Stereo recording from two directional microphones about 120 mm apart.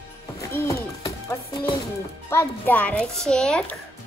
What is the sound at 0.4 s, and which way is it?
Music, 25° left (ahead or behind).